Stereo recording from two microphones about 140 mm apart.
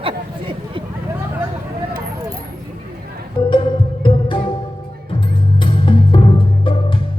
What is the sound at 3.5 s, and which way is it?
Music, 35° left (ahead or behind).